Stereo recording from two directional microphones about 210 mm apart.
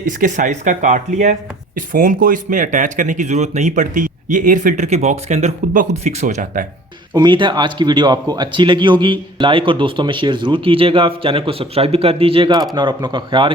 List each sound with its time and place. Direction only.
0.0 s speech: 35° right (ahead or behind)
7.1 s speech: 20° right (ahead or behind)